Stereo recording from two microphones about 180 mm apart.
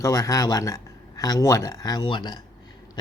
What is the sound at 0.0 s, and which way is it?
Speech, 20° left (ahead or behind).